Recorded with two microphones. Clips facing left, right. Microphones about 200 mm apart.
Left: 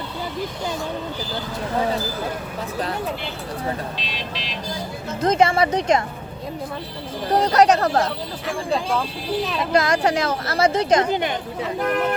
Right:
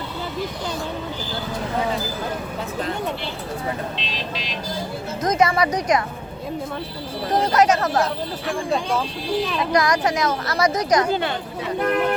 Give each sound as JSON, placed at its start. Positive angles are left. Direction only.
{"t": 5.2, "sound": "speech", "side_deg": 30}
{"t": 7.3, "sound": "speech", "side_deg": 35}
{"t": 8.4, "sound": "speech", "side_deg": 0}
{"t": 9.7, "sound": "speech", "side_deg": 25}